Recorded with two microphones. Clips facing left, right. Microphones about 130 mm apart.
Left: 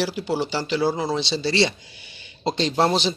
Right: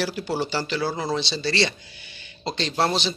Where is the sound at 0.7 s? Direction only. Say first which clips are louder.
Left 3 dB; 15° left (ahead or behind).